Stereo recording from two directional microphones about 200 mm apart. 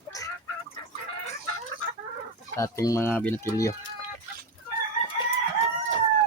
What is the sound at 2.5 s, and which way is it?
Speech, 15° left (ahead or behind).